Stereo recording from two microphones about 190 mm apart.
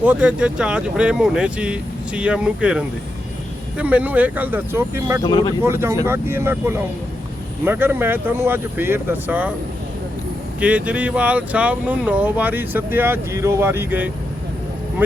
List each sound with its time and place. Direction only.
0.0 s speech: 5° right (ahead or behind)
5.2 s speech: 20° left (ahead or behind)
5.6 s speech: 15° right (ahead or behind)
10.6 s speech: 5° right (ahead or behind)